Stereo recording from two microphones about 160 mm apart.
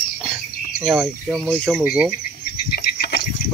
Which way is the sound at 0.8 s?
5° right (ahead or behind).